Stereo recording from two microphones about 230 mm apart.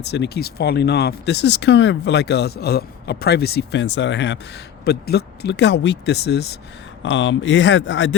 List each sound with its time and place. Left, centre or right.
0.0 s speech: left